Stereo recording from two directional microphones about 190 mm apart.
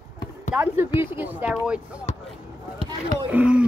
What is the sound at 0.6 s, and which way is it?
Speech, 10° right (ahead or behind).